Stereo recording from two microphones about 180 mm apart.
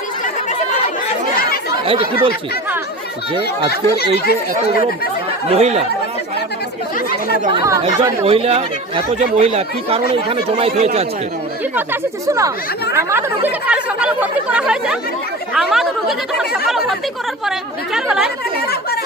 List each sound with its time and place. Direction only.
1.8 s speech: 30° right (ahead or behind)
3.7 s speech: 60° left (ahead or behind)
5.5 s speech: 35° right (ahead or behind)
7.5 s speech: 15° right (ahead or behind)
8.2 s speech: 35° right (ahead or behind)
11.7 s speech: 15° right (ahead or behind)